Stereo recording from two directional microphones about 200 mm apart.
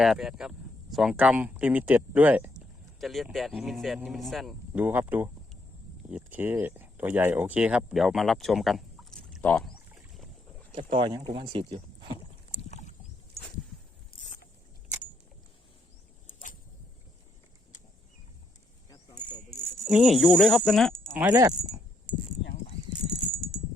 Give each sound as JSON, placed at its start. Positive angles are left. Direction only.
{"t": 0.0, "sound": "speech", "side_deg": 0}
{"t": 10.8, "sound": "speech", "side_deg": -25}
{"t": 12.6, "sound": "boat", "side_deg": 35}
{"t": 19.9, "sound": "speech", "side_deg": 0}
{"t": 21.2, "sound": "speech", "side_deg": -15}